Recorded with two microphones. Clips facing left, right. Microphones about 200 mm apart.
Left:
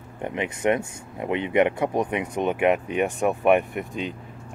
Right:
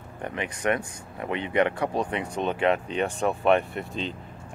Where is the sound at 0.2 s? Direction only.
20° left (ahead or behind).